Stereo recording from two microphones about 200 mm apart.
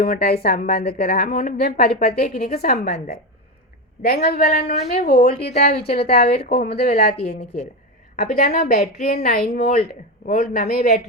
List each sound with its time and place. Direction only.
0.0 s a woman's voice: 50° left (ahead or behind)